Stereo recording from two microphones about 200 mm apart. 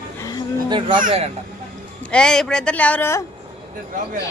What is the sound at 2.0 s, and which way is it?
Speech, 5° left (ahead or behind).